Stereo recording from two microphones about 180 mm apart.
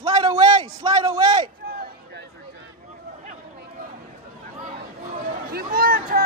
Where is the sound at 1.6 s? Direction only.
60° right (ahead or behind).